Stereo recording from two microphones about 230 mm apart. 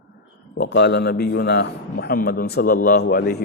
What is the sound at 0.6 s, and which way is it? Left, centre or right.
A man's voice, left.